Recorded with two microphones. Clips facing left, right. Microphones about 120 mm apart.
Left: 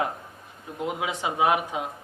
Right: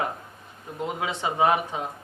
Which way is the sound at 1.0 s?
10° left (ahead or behind).